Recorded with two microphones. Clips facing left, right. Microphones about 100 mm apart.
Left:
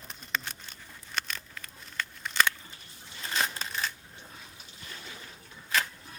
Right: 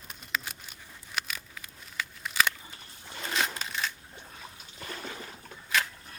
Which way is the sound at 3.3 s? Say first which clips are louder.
Even; centre (ahead or behind).